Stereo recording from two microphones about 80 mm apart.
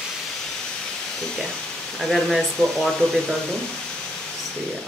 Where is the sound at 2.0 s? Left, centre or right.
Centre.